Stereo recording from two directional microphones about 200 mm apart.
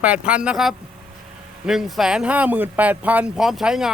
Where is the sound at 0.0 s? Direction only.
5° right (ahead or behind).